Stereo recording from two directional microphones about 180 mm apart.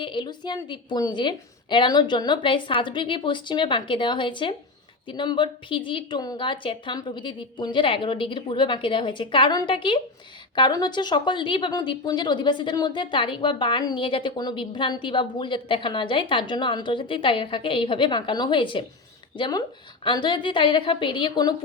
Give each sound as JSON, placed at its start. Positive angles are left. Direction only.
{"t": 0.0, "sound": "speech", "side_deg": 25}